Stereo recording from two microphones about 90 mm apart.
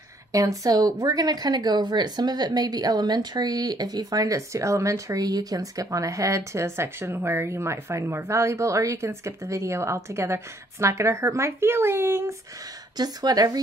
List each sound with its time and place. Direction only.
0.3 s speech: 40° right (ahead or behind)
12.9 s speech: 50° right (ahead or behind)